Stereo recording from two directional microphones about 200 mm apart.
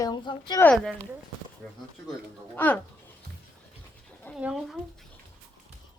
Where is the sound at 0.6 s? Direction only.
5° left (ahead or behind).